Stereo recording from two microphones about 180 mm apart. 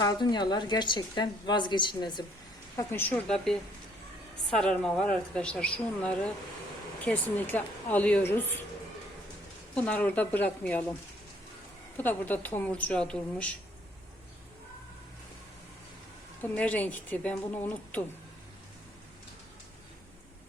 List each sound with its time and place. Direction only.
0.0 s a woman's voice: 25° left (ahead or behind)
2.7 s speech: 10° left (ahead or behind)
9.7 s speech: 10° left (ahead or behind)
11.9 s speech: 10° left (ahead or behind)
16.4 s speech: 10° left (ahead or behind)